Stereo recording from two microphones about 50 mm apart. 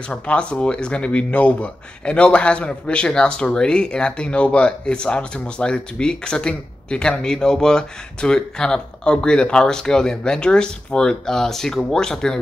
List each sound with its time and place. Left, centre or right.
0.3 s a man's voice: left